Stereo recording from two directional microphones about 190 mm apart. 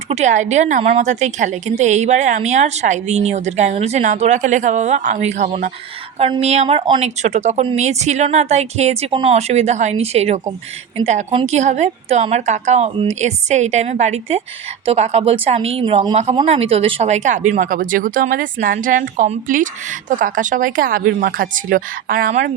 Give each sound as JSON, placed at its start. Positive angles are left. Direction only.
{"t": 0.1, "sound": "a woman's voice", "side_deg": -40}